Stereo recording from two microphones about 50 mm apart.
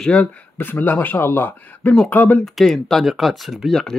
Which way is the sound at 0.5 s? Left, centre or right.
Left.